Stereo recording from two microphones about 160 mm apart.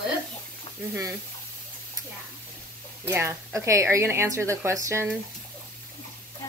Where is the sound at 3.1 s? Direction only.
20° right (ahead or behind).